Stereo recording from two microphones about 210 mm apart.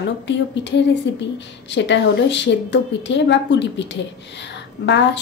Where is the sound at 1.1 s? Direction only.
55° left (ahead or behind).